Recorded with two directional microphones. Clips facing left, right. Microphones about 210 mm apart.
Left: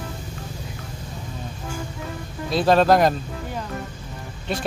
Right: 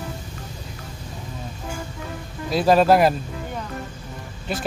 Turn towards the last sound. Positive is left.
turn(degrees=-5)  # may be behind; listen again after turning